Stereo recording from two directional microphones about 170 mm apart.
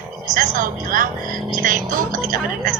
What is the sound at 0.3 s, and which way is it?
Speech, 50° right (ahead or behind).